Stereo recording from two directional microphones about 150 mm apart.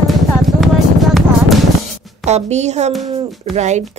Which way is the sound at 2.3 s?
50° right (ahead or behind).